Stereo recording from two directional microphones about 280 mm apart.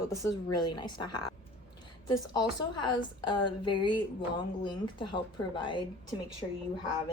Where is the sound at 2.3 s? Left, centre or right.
Centre.